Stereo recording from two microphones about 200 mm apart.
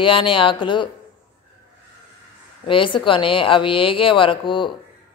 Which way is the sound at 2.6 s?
25° left (ahead or behind).